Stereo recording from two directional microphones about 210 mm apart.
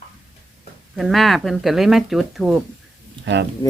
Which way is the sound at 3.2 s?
55° right (ahead or behind).